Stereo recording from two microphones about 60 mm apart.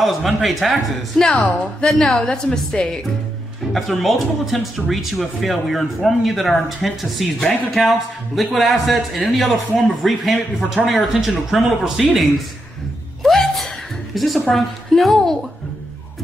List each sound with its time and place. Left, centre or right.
0.0 s speech: centre
1.2 s a woman's voice: centre
1.9 s a woman's voice: centre
3.7 s speech: centre
13.2 s a sound: centre
14.1 s speech: centre